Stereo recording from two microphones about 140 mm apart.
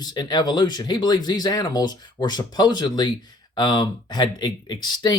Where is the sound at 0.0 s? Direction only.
30° left (ahead or behind).